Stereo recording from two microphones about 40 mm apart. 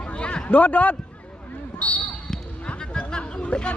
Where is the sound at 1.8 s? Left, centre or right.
Left.